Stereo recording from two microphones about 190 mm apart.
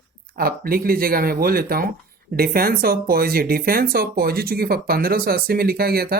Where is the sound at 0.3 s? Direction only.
50° right (ahead or behind).